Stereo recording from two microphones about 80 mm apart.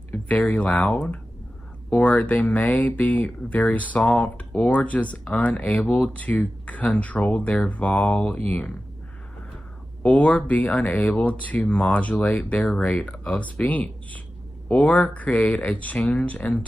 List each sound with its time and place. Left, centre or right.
0.3 s speech: centre
2.0 s speech: centre
10.0 s speech: centre